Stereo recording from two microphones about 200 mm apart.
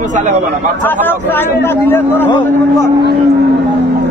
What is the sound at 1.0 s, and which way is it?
A man's voice, 10° left (ahead or behind).